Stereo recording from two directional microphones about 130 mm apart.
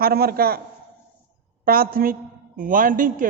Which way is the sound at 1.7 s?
90° right.